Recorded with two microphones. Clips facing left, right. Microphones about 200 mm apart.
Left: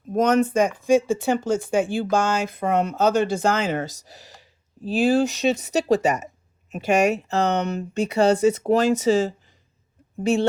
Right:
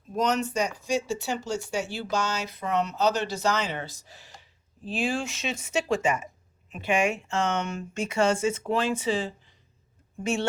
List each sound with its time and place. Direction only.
0.1 s speech: 50° left (ahead or behind); by 10.4 s 35° left (ahead or behind)